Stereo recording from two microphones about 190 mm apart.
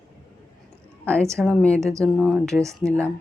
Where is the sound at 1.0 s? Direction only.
5° left (ahead or behind).